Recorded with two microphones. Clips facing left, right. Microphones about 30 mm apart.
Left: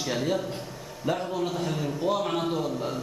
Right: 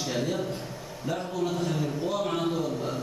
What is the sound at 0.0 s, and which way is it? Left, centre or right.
A man's voice, centre.